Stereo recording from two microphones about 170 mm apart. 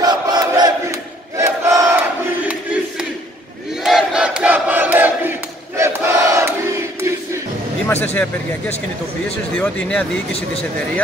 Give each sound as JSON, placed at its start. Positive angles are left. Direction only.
{"t": 0.0, "sound": "battle cry", "side_deg": -25}
{"t": 3.8, "sound": "crowd", "side_deg": -5}
{"t": 7.9, "sound": "speech", "side_deg": 10}